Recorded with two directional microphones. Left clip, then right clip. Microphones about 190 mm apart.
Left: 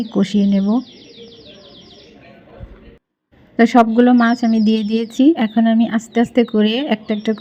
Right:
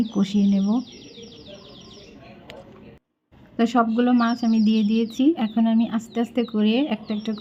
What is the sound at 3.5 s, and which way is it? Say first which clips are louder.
Speech: left 9 dB; 25° left (ahead or behind).